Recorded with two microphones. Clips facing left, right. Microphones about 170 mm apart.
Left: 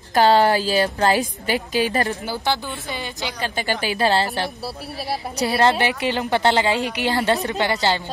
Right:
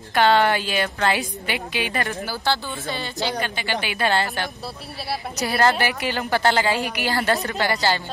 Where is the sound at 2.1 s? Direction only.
20° left (ahead or behind).